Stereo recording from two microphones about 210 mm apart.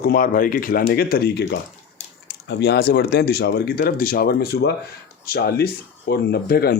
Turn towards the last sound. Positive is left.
turn(degrees=45)  # may be behind; listen again after turning